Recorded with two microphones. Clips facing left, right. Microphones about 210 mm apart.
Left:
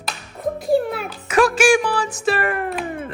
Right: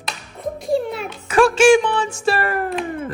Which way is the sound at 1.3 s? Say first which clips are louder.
Right 3 dB; 30° right (ahead or behind).